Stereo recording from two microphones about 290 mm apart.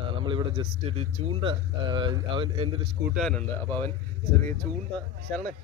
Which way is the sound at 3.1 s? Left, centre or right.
Centre.